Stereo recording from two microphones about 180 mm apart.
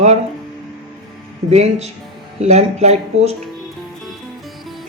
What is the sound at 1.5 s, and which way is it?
Music, 35° right (ahead or behind).